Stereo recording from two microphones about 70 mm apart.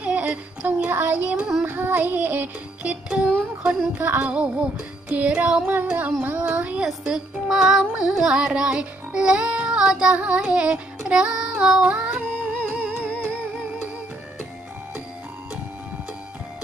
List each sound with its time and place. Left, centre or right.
0.0 s music: centre
2.9 s music: centre
4.0 s music: right
6.8 s music: centre
13.0 s music: centre